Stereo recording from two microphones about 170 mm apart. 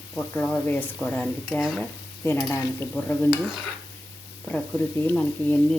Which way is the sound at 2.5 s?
15° left (ahead or behind).